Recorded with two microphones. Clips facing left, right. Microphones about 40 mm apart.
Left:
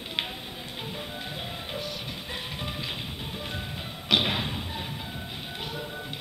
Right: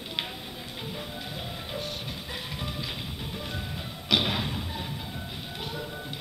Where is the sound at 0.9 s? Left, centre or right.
Centre.